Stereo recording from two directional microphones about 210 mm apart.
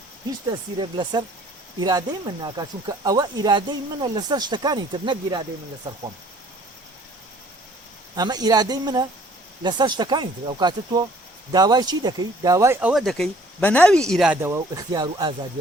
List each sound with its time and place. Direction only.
0.5 s speech: 20° right (ahead or behind)
8.1 s speech: 20° right (ahead or behind); by 14.3 s centre (ahead or behind)
14.4 s speech: 15° right (ahead or behind)